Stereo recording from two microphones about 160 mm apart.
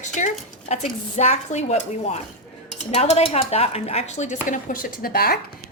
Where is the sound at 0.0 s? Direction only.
50° left (ahead or behind).